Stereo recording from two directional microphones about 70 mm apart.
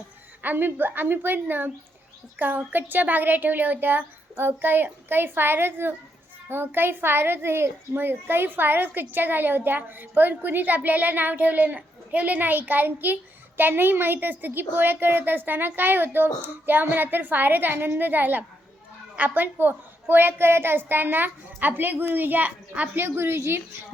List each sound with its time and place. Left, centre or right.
0.4 s a child's voice: right
23.0 s a woman's voice: right